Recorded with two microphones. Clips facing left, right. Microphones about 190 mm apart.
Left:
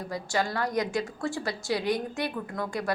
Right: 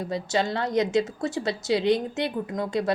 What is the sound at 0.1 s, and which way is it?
A woman's voice, 20° right (ahead or behind).